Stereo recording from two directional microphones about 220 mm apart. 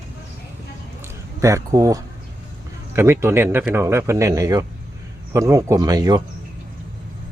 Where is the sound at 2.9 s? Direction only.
10° right (ahead or behind).